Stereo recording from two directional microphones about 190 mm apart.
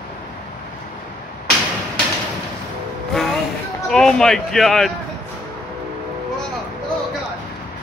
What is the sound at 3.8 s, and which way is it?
Speech, 5° left (ahead or behind).